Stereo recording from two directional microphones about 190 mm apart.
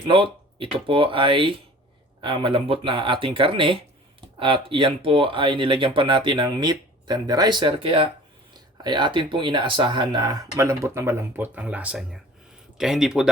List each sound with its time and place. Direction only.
0.1 s speech: 30° right (ahead or behind); by 13.2 s centre (ahead or behind)